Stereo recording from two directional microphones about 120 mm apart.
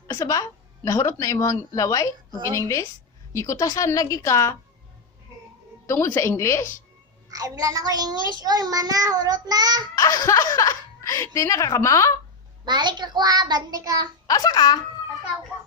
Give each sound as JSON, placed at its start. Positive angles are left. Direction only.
{"t": 0.1, "sound": "speech", "side_deg": 30}
{"t": 5.8, "sound": "a woman's voice", "side_deg": 25}
{"t": 7.3, "sound": "child singing", "side_deg": -30}
{"t": 10.0, "sound": "speech", "side_deg": 30}
{"t": 12.6, "sound": "child singing", "side_deg": -40}
{"t": 14.3, "sound": "speech", "side_deg": 30}